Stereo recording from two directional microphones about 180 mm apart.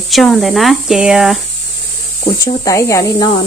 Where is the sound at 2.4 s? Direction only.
20° left (ahead or behind).